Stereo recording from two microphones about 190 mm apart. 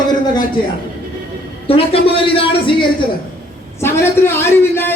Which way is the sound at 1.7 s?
30° left (ahead or behind).